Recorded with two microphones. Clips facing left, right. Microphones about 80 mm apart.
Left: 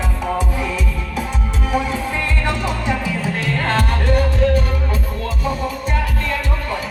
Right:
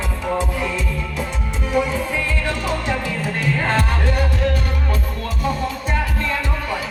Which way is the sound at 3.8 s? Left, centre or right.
Left.